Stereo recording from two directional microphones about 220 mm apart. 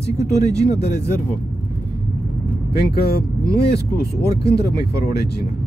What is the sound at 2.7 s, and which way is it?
Speech, 45° left (ahead or behind).